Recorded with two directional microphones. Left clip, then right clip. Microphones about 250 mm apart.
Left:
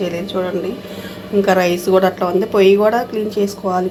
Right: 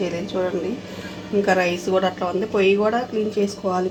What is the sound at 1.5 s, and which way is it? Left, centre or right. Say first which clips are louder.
A woman's voice: left 6 dB; centre.